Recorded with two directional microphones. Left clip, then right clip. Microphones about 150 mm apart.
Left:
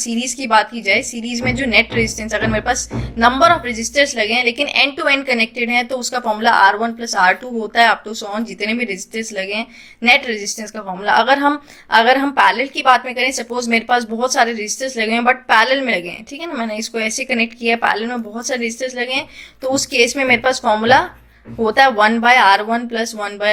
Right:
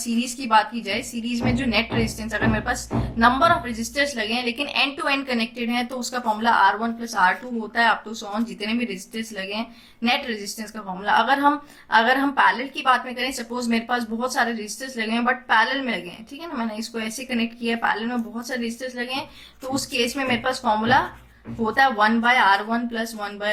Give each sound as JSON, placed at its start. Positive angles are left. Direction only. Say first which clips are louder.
{"t": 0.0, "sound": "speech", "louder": "left 5 dB", "side_deg": 25}